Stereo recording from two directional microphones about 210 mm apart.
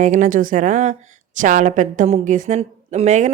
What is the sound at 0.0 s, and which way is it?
A woman's voice, 35° right (ahead or behind).